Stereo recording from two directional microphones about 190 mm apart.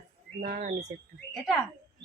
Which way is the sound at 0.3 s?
50° right (ahead or behind).